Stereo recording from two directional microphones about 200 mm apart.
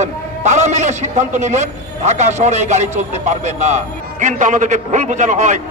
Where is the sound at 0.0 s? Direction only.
35° right (ahead or behind).